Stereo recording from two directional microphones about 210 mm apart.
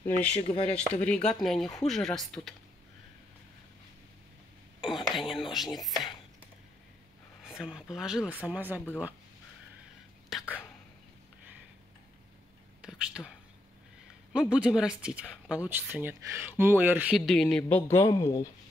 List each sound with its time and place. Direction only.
0.0 s speech: 5° left (ahead or behind)
0.4 s speech: 30° left (ahead or behind)
1.0 s speech: 5° left (ahead or behind)
5.1 s whispering: centre (ahead or behind)
5.5 s speech: centre (ahead or behind)
7.4 s speech: 5° right (ahead or behind)
10.3 s whispering: 5° right (ahead or behind)
12.8 s a sound: centre (ahead or behind)
14.3 s speech: 5° right (ahead or behind); by 18.5 s 15° left (ahead or behind)